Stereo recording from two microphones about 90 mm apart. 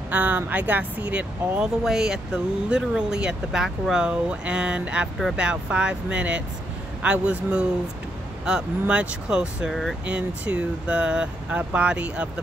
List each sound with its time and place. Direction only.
0.1 s speech: 20° right (ahead or behind)
1.9 s speech: 5° right (ahead or behind)